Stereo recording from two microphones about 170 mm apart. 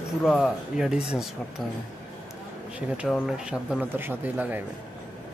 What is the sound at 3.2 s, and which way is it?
Speech, 5° right (ahead or behind).